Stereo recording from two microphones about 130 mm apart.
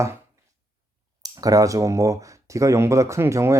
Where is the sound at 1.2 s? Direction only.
25° right (ahead or behind).